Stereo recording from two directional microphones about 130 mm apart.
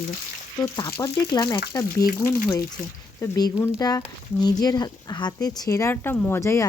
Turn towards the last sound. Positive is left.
turn(degrees=25)  # may be behind; listen again after turning